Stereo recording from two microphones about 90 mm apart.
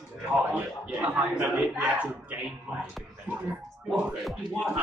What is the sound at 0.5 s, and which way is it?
A man's voice, 15° right (ahead or behind).